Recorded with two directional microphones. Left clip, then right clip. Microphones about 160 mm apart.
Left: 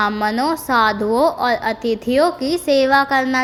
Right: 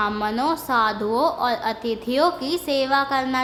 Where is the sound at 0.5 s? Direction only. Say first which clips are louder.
Left 5 dB; 30° left (ahead or behind).